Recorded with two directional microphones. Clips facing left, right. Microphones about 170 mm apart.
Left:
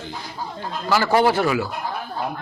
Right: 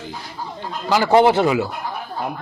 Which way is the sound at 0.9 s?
15° right (ahead or behind).